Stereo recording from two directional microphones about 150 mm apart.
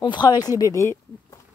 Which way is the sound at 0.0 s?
30° left (ahead or behind).